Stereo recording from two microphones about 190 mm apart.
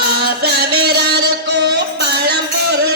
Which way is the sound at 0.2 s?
55° right (ahead or behind).